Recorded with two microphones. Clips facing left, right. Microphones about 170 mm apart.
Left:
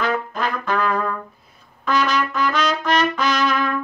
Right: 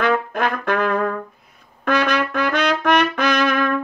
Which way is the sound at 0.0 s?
60° right (ahead or behind).